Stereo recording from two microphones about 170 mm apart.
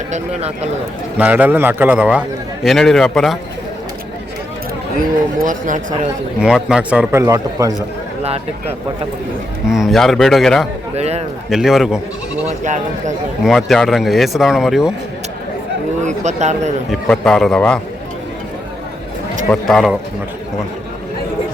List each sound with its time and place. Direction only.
0.1 s speech: 40° right (ahead or behind)
1.2 s a man's voice: 10° right (ahead or behind)
4.9 s speech: 50° right (ahead or behind)
6.4 s speech: 5° right (ahead or behind)
7.2 s a man's voice: 20° right (ahead or behind)
9.6 s speech: centre (ahead or behind)
10.9 s speech: 40° right (ahead or behind)
11.4 s speech: centre (ahead or behind)
12.5 s speech: 45° right (ahead or behind)
13.4 s speech: centre (ahead or behind)
16.0 s speech: 45° right (ahead or behind)
16.9 s speech: 5° left (ahead or behind)
19.5 s speech: centre (ahead or behind)